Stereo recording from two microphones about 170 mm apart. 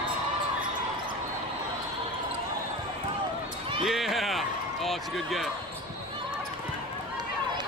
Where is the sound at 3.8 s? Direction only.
Centre (ahead or behind).